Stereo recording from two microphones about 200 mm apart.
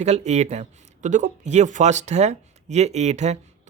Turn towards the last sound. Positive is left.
turn(degrees=-35)  # may be behind; listen again after turning